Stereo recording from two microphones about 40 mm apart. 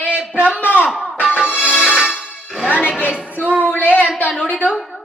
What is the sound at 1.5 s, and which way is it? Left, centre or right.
Music, left.